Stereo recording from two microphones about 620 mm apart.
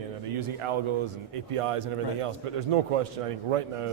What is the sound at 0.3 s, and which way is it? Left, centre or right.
A man's voice, right.